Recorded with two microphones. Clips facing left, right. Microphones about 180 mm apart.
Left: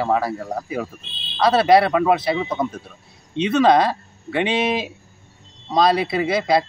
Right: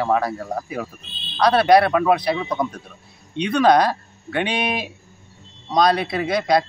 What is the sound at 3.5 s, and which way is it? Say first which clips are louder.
Speech: even; centre (ahead or behind).